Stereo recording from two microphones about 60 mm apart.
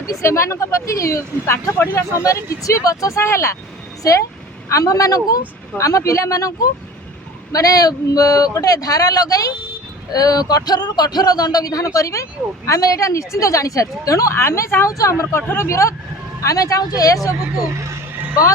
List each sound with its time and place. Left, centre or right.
0.1 s speech: left
1.9 s speech: left
3.2 s speech: left
4.7 s speech: left
5.7 s speech: left
7.5 s a man's voice: left
11.9 s speech: left
14.3 s speech: left
14.8 s speech: left
15.4 s speech: left
16.4 s speech: left